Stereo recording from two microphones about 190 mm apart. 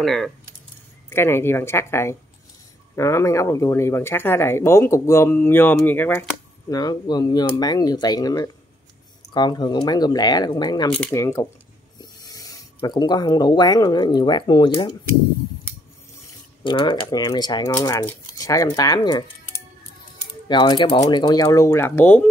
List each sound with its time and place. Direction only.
0.0 s speech: centre (ahead or behind)
1.1 s speech: 10° left (ahead or behind)
6.7 s speech: 20° left (ahead or behind)
16.6 s speech: 25° left (ahead or behind)
20.4 s speech: 25° left (ahead or behind)